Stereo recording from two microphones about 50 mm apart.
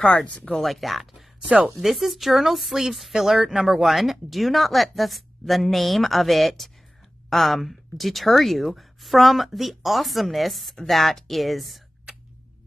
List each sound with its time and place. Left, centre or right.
0.0 s speech: centre
0.6 s speech: centre